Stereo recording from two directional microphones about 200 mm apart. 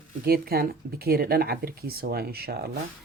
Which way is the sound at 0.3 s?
50° right (ahead or behind).